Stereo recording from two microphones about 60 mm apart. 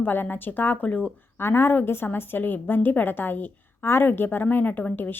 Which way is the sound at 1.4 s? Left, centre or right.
Left.